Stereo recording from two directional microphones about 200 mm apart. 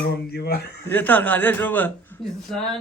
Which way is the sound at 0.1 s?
55° left (ahead or behind).